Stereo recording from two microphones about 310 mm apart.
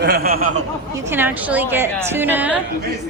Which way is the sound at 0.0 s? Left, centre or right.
Right.